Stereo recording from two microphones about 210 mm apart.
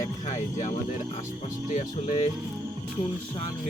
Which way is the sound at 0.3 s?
35° left (ahead or behind).